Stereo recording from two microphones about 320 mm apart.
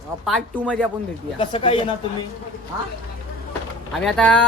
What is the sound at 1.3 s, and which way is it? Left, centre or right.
Speech, centre.